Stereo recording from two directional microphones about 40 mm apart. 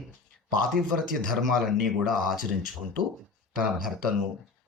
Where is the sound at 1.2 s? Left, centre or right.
Centre.